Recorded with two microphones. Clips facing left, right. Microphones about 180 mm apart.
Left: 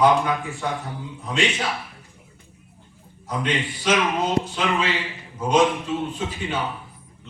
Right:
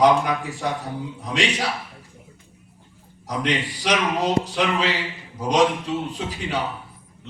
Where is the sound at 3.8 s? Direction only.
70° right (ahead or behind).